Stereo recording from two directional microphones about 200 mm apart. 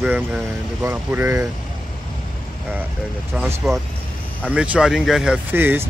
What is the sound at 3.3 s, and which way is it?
Speech, 5° right (ahead or behind).